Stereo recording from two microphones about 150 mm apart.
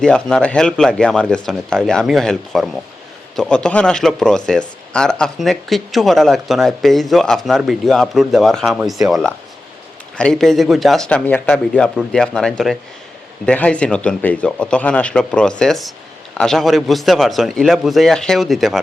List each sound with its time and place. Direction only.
0.0 s speech: 5° left (ahead or behind)